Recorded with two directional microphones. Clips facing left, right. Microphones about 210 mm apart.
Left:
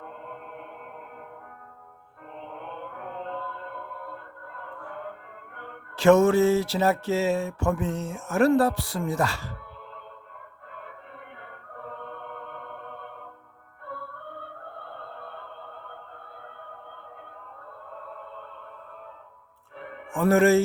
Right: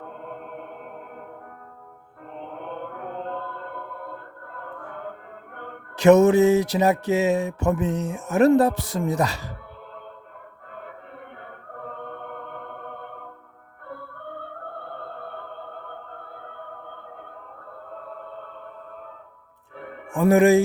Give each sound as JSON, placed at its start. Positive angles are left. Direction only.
{"t": 3.0, "sound": "music", "side_deg": -45}
{"t": 6.0, "sound": "a sound", "side_deg": -20}
{"t": 20.1, "sound": "a man's voice", "side_deg": -15}